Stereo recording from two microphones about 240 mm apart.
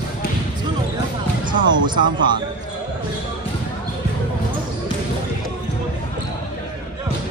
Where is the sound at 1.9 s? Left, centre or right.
Centre.